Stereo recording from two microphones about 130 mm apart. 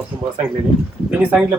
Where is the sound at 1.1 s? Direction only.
10° right (ahead or behind).